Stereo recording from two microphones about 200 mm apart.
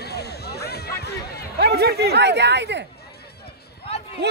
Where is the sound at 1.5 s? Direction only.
55° right (ahead or behind).